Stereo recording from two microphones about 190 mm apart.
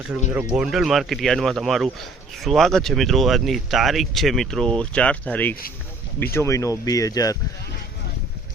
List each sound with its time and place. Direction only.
0.5 s speech: centre (ahead or behind); by 7.3 s 20° left (ahead or behind)